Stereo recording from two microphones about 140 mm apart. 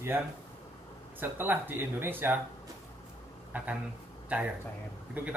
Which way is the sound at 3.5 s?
10° right (ahead or behind).